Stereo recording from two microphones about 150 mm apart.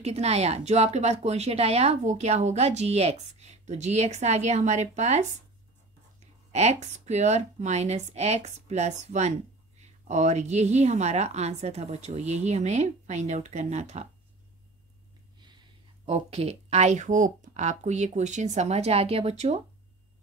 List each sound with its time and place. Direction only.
0.0 s speech: 45° right (ahead or behind)
6.5 s speech: 50° right (ahead or behind)
16.1 s speech: 45° right (ahead or behind)